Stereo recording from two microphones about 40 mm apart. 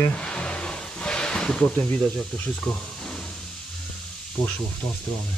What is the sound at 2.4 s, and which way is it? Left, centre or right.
Speech, left.